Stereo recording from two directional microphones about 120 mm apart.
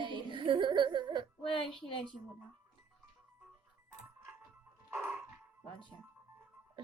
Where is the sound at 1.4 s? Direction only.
40° left (ahead or behind).